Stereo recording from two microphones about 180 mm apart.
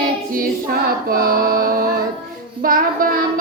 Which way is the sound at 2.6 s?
50° right (ahead or behind).